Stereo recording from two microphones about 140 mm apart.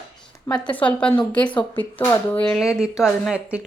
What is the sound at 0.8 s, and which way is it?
Speech, 10° left (ahead or behind).